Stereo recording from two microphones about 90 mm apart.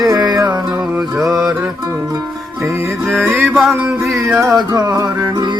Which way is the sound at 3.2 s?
20° right (ahead or behind).